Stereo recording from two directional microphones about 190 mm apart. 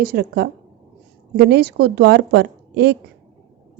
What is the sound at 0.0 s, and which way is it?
A woman's voice, 50° right (ahead or behind).